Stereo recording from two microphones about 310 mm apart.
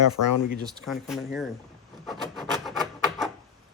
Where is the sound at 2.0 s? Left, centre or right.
Centre.